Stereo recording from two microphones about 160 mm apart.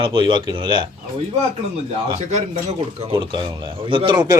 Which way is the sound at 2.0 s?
45° right (ahead or behind).